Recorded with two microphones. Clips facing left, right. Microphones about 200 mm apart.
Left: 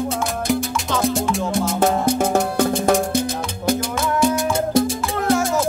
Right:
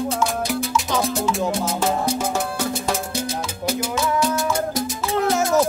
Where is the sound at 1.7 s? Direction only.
55° left (ahead or behind).